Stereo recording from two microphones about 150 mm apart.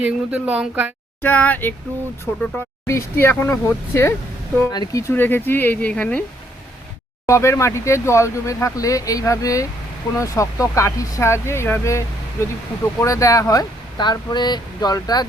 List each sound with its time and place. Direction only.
0.0 s a woman's voice: 10° right (ahead or behind)
1.2 s speech: 10° left (ahead or behind)
7.3 s speech: 20° left (ahead or behind)